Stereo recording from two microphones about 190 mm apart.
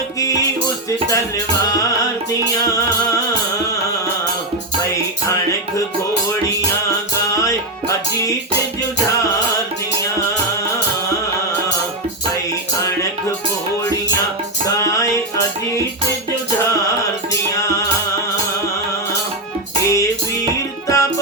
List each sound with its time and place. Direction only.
0.9 s music: 15° left (ahead or behind)
7.4 s music: 15° left (ahead or behind)
14.8 s music: 15° left (ahead or behind)
19.8 s music: 15° left (ahead or behind)